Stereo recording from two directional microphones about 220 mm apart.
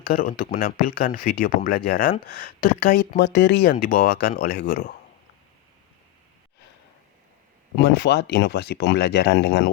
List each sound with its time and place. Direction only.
0.1 s speech: 40° left (ahead or behind)
7.8 s speech: 50° left (ahead or behind)